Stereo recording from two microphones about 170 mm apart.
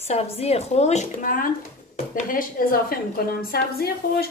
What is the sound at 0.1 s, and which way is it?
A woman's voice, 35° left (ahead or behind).